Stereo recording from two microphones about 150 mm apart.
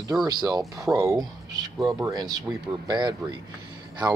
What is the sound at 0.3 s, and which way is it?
Speech, 25° right (ahead or behind).